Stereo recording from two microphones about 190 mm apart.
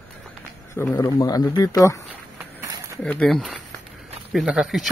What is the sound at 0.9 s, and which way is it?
Speech, 20° left (ahead or behind).